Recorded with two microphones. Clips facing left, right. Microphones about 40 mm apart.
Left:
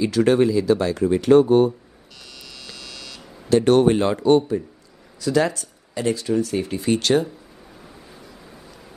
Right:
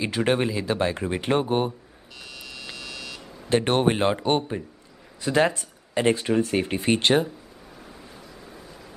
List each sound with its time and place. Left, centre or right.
0.0 s speech: right
2.2 s buzzer: centre
3.4 s speech: right